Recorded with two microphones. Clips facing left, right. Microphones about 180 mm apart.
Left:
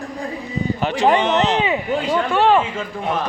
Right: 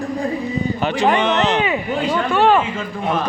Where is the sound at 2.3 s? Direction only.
25° left (ahead or behind).